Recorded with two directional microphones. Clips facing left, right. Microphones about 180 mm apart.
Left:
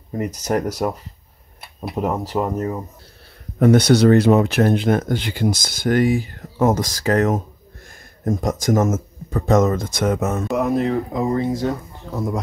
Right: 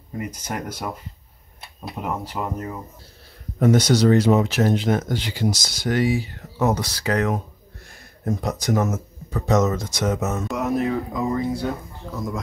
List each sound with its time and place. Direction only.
0.2 s speech: 40° left (ahead or behind)
2.0 s speech: 40° left (ahead or behind)
3.5 s speech: 60° left (ahead or behind)
10.5 s speech: 25° left (ahead or behind)